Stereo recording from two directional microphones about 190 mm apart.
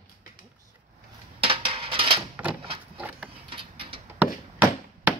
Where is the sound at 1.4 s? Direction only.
30° right (ahead or behind).